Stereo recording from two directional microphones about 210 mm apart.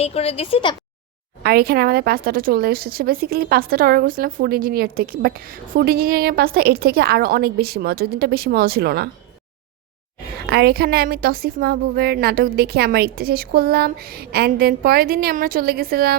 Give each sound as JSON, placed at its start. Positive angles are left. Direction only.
{"t": 0.0, "sound": "speech", "side_deg": 30}
{"t": 1.5, "sound": "a woman's voice", "side_deg": -45}
{"t": 10.5, "sound": "a woman's voice", "side_deg": -50}